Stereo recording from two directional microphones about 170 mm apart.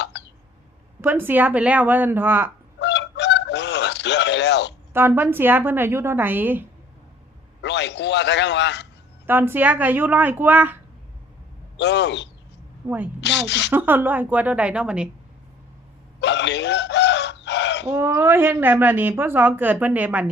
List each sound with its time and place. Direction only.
1.0 s speech: 10° right (ahead or behind)
2.8 s fowl: 90° left
4.9 s speech: 15° right (ahead or behind)
7.6 s a sound: 90° left
9.2 s speech: 10° right (ahead or behind)
11.8 s speech: 90° left
12.8 s speech: 15° right (ahead or behind)
13.2 s a woman's voice: 90° left
13.7 s speech: 10° right (ahead or behind)
16.2 s chicken: 90° left
17.8 s speech: 15° right (ahead or behind)